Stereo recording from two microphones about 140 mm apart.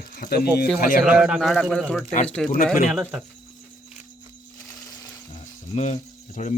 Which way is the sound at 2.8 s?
5° right (ahead or behind).